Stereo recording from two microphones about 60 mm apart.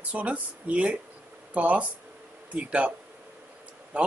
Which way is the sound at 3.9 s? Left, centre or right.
Right.